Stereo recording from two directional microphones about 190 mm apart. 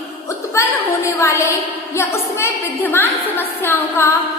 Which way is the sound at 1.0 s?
15° left (ahead or behind).